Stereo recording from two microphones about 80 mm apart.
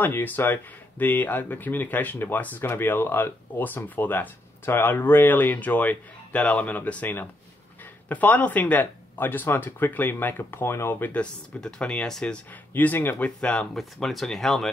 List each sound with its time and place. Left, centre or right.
0.0 s speech: left
11.1 s speech: centre
12.7 s speech: left
13.4 s speech: centre